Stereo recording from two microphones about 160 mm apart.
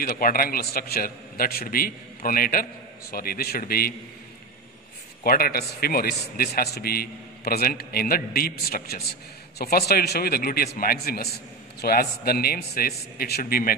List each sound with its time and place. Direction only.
0.0 s a man's voice: 65° left (ahead or behind)
5.2 s a man's voice: 70° left (ahead or behind)